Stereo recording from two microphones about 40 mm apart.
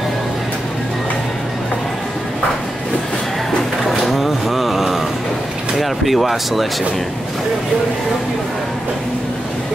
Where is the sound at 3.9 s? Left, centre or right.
Centre.